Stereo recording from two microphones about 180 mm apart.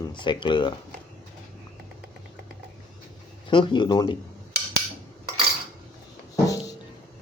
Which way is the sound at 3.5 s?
25° left (ahead or behind).